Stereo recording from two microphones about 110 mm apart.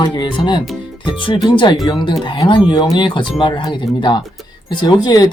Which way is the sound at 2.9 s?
45° left (ahead or behind).